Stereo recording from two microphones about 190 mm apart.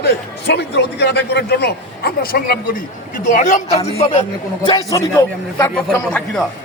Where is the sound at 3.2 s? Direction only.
40° left (ahead or behind).